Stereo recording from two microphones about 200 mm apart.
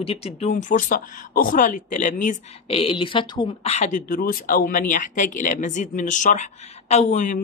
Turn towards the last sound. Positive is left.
turn(degrees=35)  # may be behind; listen again after turning